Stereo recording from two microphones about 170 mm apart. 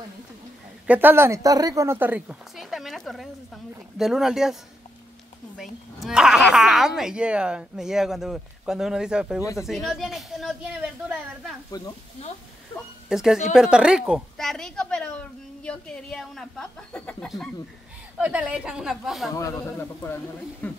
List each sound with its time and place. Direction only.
0.8 s a woman's voice: 10° right (ahead or behind)
5.6 s a woman's voice: centre (ahead or behind)
11.7 s speech: 25° left (ahead or behind)
13.1 s a woman's voice: 5° right (ahead or behind)
18.1 s a woman's voice: 5° right (ahead or behind)
19.3 s a man's voice: 15° left (ahead or behind)